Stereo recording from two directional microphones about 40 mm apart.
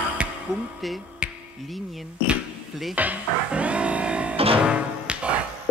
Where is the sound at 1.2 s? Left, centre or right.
Right.